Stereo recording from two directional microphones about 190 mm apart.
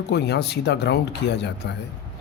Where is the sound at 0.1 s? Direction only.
60° left (ahead or behind).